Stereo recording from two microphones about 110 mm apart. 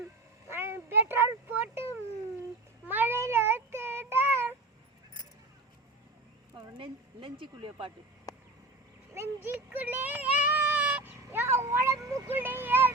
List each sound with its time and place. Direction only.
0.5 s a sound: 25° right (ahead or behind)
2.8 s child singing: 15° right (ahead or behind)
6.7 s speech: 50° right (ahead or behind)
9.1 s child singing: 20° right (ahead or behind)